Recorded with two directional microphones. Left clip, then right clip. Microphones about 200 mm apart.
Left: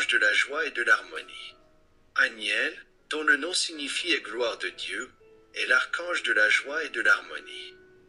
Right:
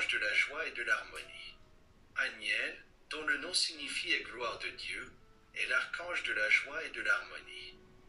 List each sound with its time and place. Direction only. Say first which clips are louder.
0.0 s speech: left 9 dB; 40° left (ahead or behind)